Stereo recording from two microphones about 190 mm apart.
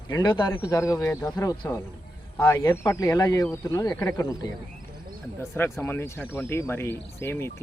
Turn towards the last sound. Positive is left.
turn(degrees=10)  # may be behind; listen again after turning